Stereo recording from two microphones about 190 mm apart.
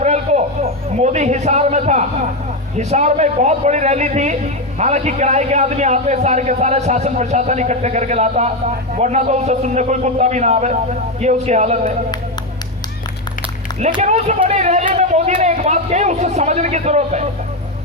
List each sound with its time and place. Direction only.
0.0 s a man's voice: 35° right (ahead or behind)
13.7 s a man's voice: 35° right (ahead or behind)